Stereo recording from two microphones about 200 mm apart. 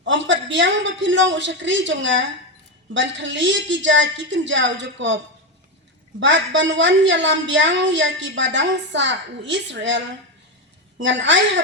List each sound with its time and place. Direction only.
0.0 s a woman's voice: 65° right (ahead or behind)